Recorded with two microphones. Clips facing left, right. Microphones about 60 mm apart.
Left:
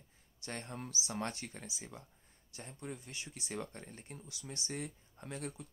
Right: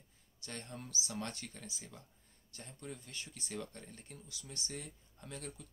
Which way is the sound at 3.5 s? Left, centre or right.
Left.